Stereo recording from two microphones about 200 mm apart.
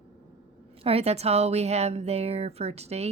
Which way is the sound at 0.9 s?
30° right (ahead or behind).